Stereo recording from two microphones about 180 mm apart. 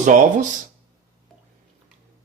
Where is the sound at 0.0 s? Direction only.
45° right (ahead or behind).